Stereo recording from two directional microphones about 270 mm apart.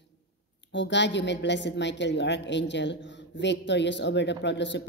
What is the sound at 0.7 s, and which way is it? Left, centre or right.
A woman's voice, left.